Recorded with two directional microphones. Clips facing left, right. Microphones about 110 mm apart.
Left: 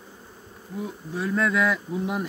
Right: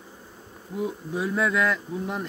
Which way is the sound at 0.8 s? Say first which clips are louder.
Right 3 dB; 15° right (ahead or behind).